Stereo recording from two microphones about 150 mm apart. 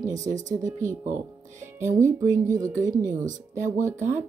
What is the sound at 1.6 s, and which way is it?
Music, 20° right (ahead or behind).